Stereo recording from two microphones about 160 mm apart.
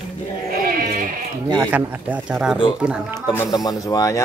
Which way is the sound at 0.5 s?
65° right (ahead or behind).